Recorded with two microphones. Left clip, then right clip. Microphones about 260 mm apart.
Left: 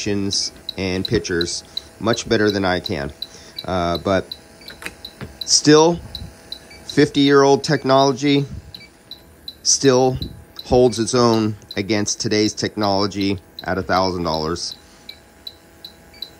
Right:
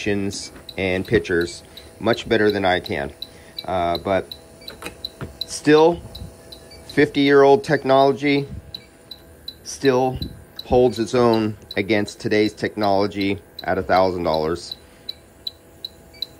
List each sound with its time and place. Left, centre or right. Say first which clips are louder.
0.0 s speech: left 3 dB; centre
4.6 s a sound: even; centre
5.5 s speech: left 2 dB; centre
7.0 s speech: left 1 dB; centre
9.7 s speech: left 4 dB; centre